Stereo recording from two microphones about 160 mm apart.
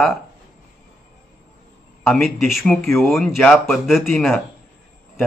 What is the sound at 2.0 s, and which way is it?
Speech, centre (ahead or behind).